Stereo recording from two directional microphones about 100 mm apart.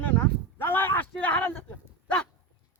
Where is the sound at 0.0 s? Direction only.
15° left (ahead or behind).